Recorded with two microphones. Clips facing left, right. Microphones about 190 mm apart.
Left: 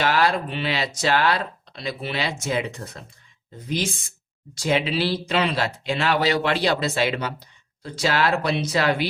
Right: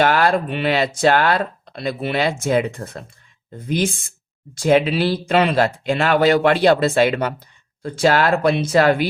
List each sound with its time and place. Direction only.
0.0 s speech: 55° right (ahead or behind)